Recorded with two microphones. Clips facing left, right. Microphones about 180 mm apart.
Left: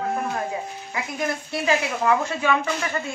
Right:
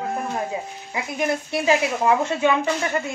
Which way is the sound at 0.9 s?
20° right (ahead or behind).